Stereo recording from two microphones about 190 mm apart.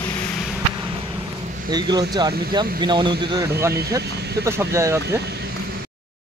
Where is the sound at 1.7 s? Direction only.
20° right (ahead or behind).